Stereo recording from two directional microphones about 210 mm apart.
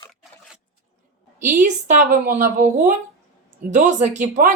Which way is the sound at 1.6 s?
35° right (ahead or behind).